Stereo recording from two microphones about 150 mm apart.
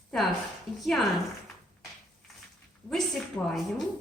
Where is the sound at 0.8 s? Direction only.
Centre (ahead or behind).